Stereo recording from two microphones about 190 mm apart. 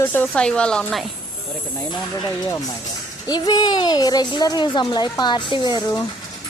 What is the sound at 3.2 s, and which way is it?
Speech, 20° left (ahead or behind).